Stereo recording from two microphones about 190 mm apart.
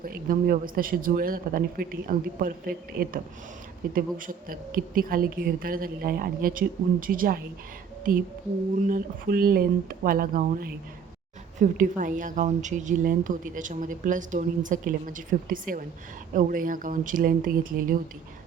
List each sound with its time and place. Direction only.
0.0 s speech: 50° right (ahead or behind)
8.9 s speech: 50° right (ahead or behind)